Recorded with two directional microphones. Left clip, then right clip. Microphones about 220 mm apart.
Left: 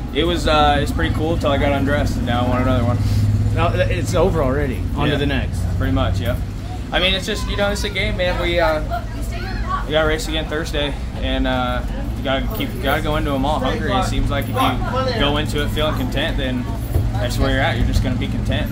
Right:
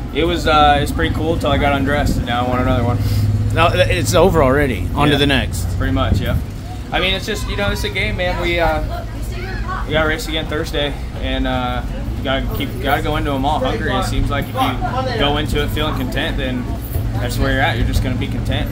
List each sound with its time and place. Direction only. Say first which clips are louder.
0.1 s speech: right 2 dB; 5° right (ahead or behind)
3.5 s speech: right 6 dB; 25° right (ahead or behind)
5.8 s speech: right 2 dB; 5° right (ahead or behind)
9.8 s speech: right 1 dB; centre (ahead or behind)